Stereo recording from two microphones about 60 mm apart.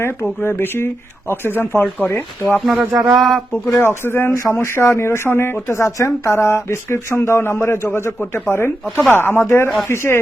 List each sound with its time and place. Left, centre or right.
0.0 s speech: left
2.6 s speech: centre
3.8 s speech: left
5.7 s a woman's voice: left
6.3 s speech: left